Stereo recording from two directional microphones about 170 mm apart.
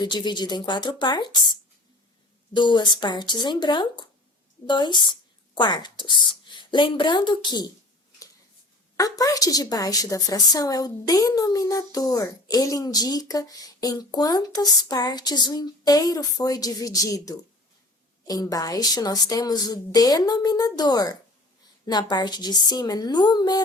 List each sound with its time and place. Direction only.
0.0 s a woman's voice: 25° left (ahead or behind)
2.5 s a woman's voice: 25° left (ahead or behind)
9.0 s a woman's voice: 20° left (ahead or behind)